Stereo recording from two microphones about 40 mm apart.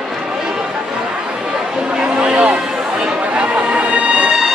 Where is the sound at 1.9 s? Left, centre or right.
Right.